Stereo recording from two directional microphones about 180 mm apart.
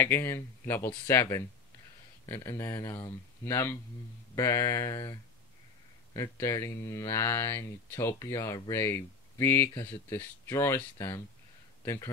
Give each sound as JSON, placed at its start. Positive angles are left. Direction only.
{"t": 0.0, "sound": "speech", "side_deg": 15}
{"t": 6.1, "sound": "speech", "side_deg": 15}